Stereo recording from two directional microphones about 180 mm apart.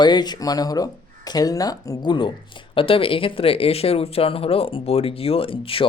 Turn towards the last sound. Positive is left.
turn(degrees=30)  # may be behind; listen again after turning